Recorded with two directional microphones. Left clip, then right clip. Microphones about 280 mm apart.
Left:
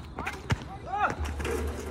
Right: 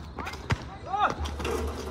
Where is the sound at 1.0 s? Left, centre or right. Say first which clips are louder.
Right 2 dB; centre.